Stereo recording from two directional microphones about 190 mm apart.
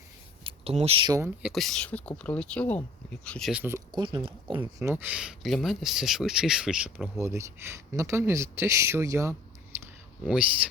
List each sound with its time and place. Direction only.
0.4 s speech: 30° right (ahead or behind)
1.2 s speech: 5° right (ahead or behind)
3.5 s speech: 10° right (ahead or behind)
3.9 s speech: 25° right (ahead or behind)
4.6 s speech: 15° right (ahead or behind)